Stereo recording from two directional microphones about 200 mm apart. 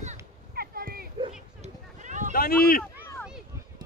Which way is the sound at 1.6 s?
40° right (ahead or behind).